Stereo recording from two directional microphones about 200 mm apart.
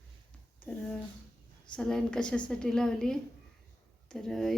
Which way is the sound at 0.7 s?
5° left (ahead or behind).